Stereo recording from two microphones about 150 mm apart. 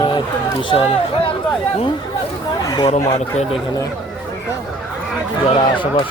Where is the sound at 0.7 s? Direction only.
40° left (ahead or behind).